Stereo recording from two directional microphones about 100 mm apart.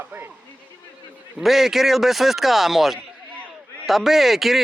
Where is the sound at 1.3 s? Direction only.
Centre (ahead or behind).